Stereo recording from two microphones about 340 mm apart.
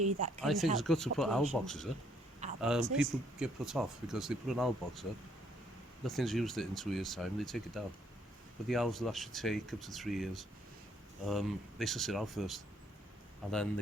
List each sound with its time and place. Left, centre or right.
0.0 s speech: centre
0.4 s speech: centre
6.1 s speech: centre